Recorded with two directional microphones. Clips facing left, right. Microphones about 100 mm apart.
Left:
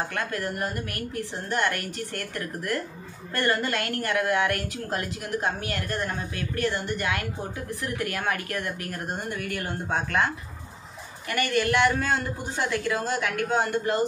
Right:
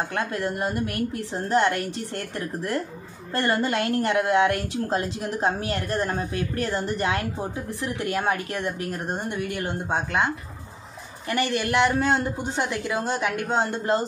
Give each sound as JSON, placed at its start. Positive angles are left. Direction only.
{"t": 0.1, "sound": "speech", "side_deg": -25}